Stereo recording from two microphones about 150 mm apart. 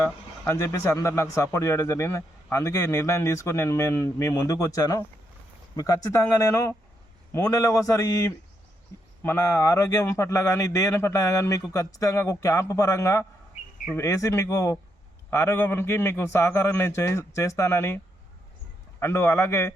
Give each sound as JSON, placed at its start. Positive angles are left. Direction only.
{"t": 0.4, "sound": "a man's voice", "side_deg": 20}
{"t": 8.9, "sound": "a sound", "side_deg": 20}
{"t": 9.2, "sound": "a man's voice", "side_deg": 15}